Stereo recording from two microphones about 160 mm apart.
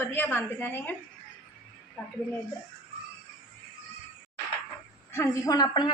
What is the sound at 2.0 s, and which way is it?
Speech, 5° left (ahead or behind).